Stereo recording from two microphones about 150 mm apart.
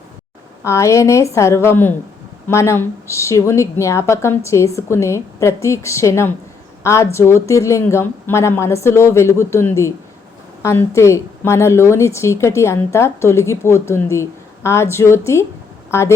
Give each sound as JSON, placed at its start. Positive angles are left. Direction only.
{"t": 0.6, "sound": "a woman's voice", "side_deg": 20}